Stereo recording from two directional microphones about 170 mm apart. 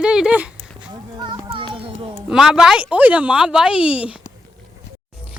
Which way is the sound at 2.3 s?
5° right (ahead or behind).